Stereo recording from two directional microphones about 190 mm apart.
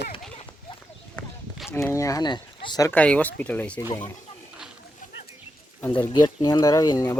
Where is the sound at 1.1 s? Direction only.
Centre (ahead or behind).